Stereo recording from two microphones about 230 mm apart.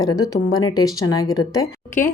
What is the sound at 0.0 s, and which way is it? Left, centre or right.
A woman's voice, centre.